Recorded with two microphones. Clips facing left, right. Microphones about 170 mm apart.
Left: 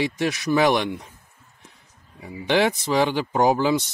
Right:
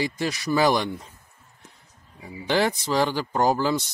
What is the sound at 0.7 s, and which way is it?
Speech, 20° left (ahead or behind).